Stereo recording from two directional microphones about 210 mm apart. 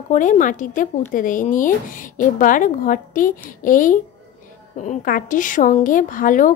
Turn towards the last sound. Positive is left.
turn(degrees=40)  # may be behind; listen again after turning